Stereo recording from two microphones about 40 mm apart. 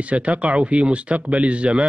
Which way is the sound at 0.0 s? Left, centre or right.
Right.